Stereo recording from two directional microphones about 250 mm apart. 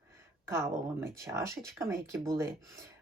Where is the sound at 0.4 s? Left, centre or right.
Centre.